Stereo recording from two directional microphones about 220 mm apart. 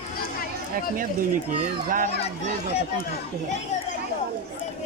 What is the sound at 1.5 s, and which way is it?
A child's voice, 35° right (ahead or behind).